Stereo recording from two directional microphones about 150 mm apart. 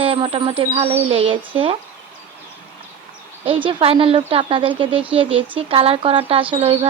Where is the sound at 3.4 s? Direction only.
40° right (ahead or behind).